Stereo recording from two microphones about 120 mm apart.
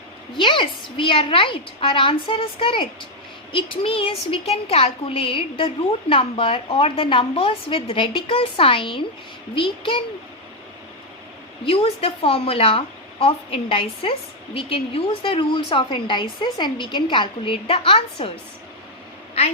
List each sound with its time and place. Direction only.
0.3 s a woman's voice: 45° left (ahead or behind)
11.6 s a woman's voice: 55° left (ahead or behind)